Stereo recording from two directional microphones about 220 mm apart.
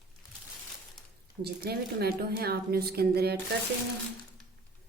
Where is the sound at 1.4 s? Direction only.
45° right (ahead or behind).